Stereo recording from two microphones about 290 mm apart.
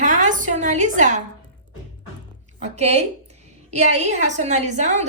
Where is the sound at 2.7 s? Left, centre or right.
Right.